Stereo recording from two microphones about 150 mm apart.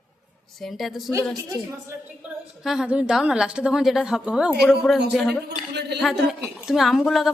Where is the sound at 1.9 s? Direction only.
10° right (ahead or behind).